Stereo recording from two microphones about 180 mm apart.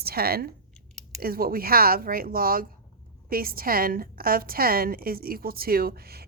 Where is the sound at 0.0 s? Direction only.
55° right (ahead or behind).